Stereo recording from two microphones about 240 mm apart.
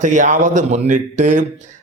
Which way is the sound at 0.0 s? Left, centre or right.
Right.